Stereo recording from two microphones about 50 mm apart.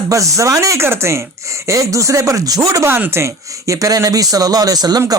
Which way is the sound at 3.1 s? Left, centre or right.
Right.